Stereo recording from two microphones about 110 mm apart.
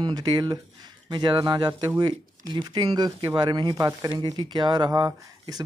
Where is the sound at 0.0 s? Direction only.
45° right (ahead or behind).